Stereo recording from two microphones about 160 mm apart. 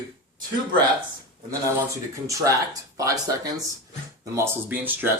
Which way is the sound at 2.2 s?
20° right (ahead or behind).